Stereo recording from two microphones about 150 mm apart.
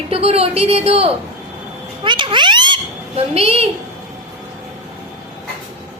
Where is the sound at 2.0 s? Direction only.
30° right (ahead or behind).